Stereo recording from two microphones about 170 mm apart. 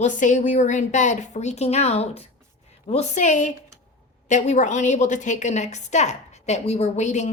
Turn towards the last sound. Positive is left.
turn(degrees=45)  # may be behind; listen again after turning